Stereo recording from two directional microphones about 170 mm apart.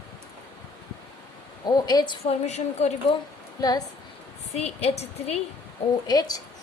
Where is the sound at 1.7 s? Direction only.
25° left (ahead or behind); by 2.9 s 40° left (ahead or behind).